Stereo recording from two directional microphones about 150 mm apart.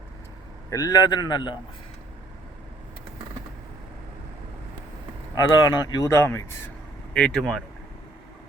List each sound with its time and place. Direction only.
0.7 s speech: 25° left (ahead or behind)
5.3 s speech: 25° left (ahead or behind)
7.1 s speech: 5° left (ahead or behind)